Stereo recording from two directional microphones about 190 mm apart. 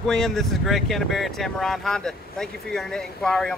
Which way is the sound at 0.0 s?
Centre (ahead or behind).